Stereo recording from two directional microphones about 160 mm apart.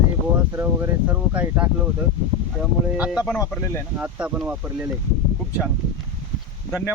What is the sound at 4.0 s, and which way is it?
Speech, 5° right (ahead or behind).